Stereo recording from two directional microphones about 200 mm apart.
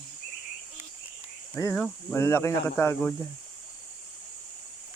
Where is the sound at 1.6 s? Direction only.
10° left (ahead or behind).